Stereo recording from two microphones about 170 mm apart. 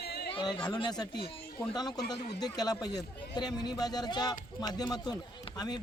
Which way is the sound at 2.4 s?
20° left (ahead or behind).